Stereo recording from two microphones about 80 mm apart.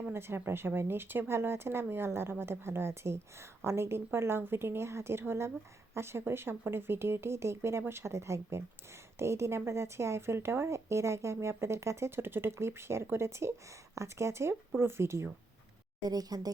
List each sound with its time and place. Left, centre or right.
0.1 s a woman's voice: right
16.0 s speech: right